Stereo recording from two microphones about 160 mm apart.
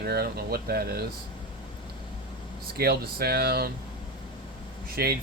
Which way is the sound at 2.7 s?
70° right (ahead or behind).